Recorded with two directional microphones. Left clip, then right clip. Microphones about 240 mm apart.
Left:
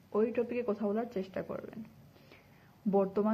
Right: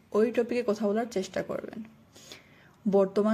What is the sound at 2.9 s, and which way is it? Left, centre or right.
Speech, right.